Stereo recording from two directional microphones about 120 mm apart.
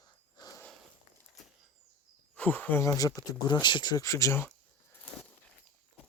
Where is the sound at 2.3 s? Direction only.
10° left (ahead or behind).